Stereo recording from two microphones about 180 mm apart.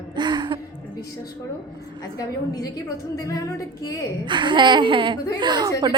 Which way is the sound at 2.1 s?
20° left (ahead or behind).